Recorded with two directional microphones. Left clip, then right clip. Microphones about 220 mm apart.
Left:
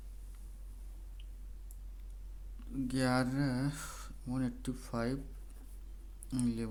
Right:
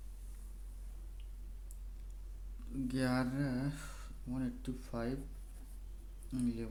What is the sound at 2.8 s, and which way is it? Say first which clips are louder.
Speech: left 3 dB; 20° left (ahead or behind).